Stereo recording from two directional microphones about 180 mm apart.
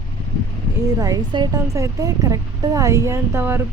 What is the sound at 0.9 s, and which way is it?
Speech, 20° right (ahead or behind).